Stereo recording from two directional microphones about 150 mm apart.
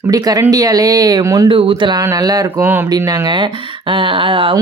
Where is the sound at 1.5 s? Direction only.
35° right (ahead or behind); by 2.8 s 15° right (ahead or behind).